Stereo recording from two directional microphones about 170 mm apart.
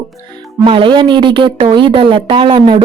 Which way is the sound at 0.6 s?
30° right (ahead or behind).